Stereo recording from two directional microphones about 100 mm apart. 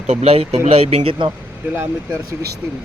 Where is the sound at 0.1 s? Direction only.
85° right.